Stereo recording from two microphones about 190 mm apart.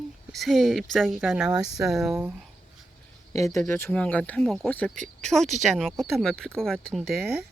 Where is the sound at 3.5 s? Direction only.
15° left (ahead or behind).